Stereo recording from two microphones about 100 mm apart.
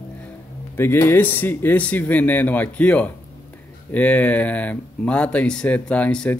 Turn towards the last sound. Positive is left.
turn(degrees=10)  # may be behind; listen again after turning